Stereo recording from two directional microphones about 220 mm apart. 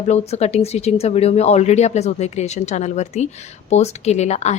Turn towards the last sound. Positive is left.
turn(degrees=30)  # may be behind; listen again after turning